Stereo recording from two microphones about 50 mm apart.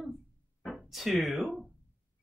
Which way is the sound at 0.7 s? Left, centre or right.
Centre.